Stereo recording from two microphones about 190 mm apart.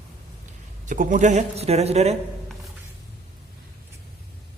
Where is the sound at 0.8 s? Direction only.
45° right (ahead or behind).